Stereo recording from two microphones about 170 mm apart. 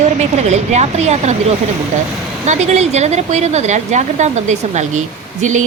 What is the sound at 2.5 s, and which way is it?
Speech, 40° right (ahead or behind).